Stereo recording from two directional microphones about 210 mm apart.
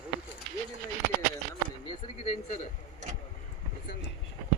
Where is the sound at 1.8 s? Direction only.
30° left (ahead or behind).